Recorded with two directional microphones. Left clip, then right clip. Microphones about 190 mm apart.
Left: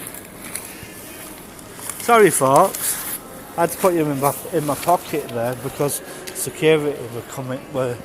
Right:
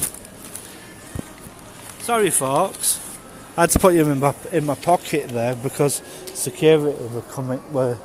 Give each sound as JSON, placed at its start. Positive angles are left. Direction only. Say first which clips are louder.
{"t": 2.0, "sound": "speech", "louder": "left 6 dB", "side_deg": 5}
{"t": 3.6, "sound": "speech", "louder": "right 3 dB", "side_deg": -60}